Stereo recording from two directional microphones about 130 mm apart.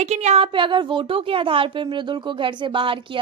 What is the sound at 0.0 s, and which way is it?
A woman's voice, 60° right (ahead or behind).